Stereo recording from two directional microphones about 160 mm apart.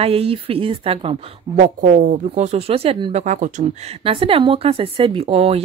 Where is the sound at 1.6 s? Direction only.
50° right (ahead or behind).